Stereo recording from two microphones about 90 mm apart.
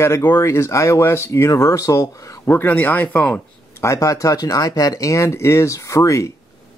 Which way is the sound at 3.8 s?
35° left (ahead or behind).